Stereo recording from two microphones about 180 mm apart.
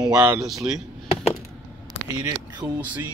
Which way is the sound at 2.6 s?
5° right (ahead or behind).